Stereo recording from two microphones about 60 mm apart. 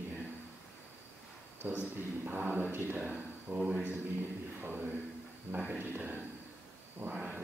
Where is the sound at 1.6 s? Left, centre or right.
Right.